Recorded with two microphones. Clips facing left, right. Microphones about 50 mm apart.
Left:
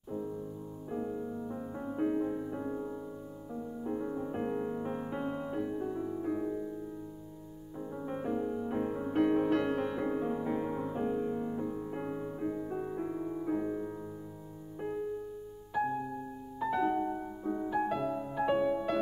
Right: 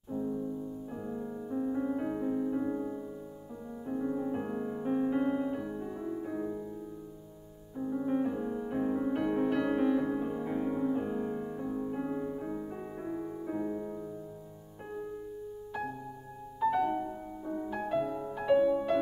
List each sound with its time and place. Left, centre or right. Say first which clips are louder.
0.8 s music: left 2 dB; centre
3.8 s music: right 3 dB; centre
4.4 s music: left 1 dB; centre
7.7 s music: right 7 dB; centre
11.9 s music: right 3 dB; centre
16.5 s music: right 2 dB; centre
18.4 s music: right 4 dB; centre